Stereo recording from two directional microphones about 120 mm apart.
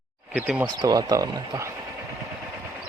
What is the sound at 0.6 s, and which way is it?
Speech, 35° right (ahead or behind).